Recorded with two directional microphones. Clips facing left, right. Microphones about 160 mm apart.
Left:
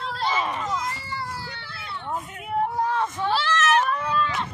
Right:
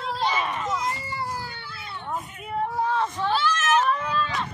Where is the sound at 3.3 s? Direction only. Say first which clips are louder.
Left 2 dB; 90° left.